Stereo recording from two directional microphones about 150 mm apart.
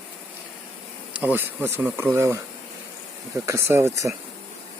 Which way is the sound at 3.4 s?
20° right (ahead or behind).